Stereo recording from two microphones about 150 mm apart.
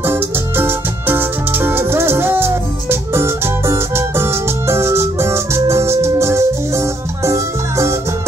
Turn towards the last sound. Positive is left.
turn(degrees=-20)  # may be behind; listen again after turning